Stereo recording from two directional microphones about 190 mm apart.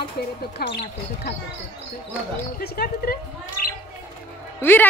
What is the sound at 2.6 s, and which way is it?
Speech, 55° left (ahead or behind).